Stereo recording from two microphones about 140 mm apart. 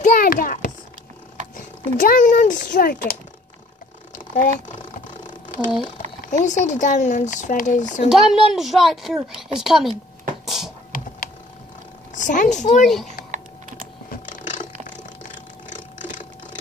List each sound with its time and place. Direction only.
0.0 s a sound: 80° left
2.0 s a child's voice: 75° left (ahead or behind)
4.3 s speech: 65° left (ahead or behind)
5.5 s speech: 90° left
6.4 s speech: 60° left (ahead or behind)
8.1 s a woman's voice: centre (ahead or behind)
10.4 s a sound: centre (ahead or behind)
12.2 s speech: 65° left (ahead or behind)
12.8 s a woman's voice: centre (ahead or behind)
14.1 s mechanisms: 65° left (ahead or behind)